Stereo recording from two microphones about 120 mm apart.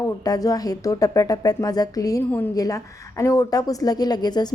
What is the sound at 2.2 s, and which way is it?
Speech, 15° left (ahead or behind).